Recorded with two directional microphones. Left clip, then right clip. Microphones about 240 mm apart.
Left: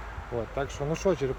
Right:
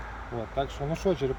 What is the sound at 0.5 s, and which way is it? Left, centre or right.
Speech, centre.